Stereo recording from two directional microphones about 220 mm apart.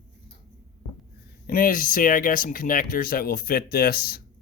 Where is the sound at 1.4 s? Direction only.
40° left (ahead or behind).